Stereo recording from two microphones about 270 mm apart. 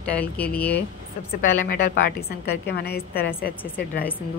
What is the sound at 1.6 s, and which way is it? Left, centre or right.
A woman's voice, left.